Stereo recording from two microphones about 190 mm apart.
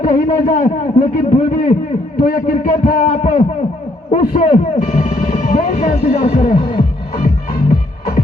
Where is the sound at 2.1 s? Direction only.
50° left (ahead or behind).